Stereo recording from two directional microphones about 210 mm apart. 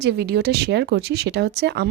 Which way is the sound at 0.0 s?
50° right (ahead or behind).